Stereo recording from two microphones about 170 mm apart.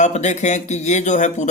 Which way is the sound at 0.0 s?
45° left (ahead or behind).